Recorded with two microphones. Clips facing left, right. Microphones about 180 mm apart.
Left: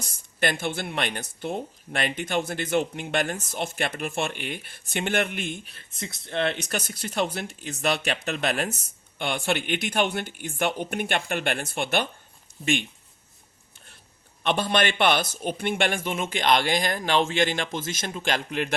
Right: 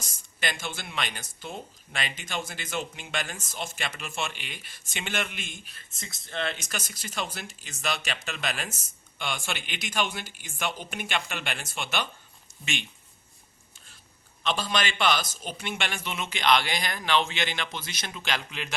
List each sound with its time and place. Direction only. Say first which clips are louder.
0.0 s speech: left 7 dB; 60° left (ahead or behind)
14.4 s a man's voice: left 5 dB; 60° left (ahead or behind)